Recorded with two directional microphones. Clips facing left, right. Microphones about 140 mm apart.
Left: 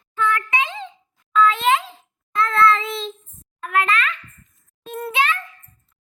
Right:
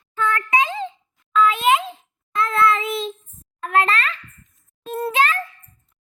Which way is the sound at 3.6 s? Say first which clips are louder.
Right 1 dB; 35° right (ahead or behind).